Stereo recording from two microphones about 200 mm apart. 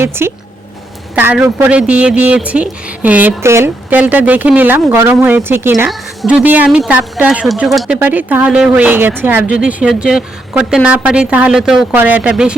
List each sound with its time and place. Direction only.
0.0 s a woman's voice: 10° right (ahead or behind)